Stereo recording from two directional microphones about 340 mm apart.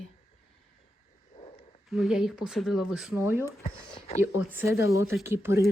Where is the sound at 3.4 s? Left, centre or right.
Centre.